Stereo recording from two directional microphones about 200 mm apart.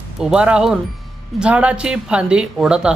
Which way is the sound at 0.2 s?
5° right (ahead or behind).